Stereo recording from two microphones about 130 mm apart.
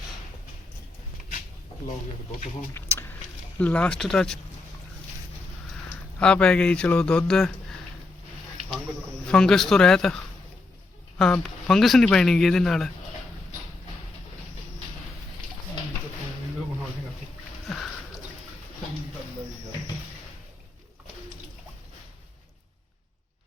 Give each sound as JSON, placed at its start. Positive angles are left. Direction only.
{"t": 2.7, "sound": "a sound", "side_deg": 20}
{"t": 3.6, "sound": "speech", "side_deg": 10}
{"t": 6.1, "sound": "a man's voice", "side_deg": 10}
{"t": 9.2, "sound": "speech", "side_deg": 5}
{"t": 11.2, "sound": "speech", "side_deg": 5}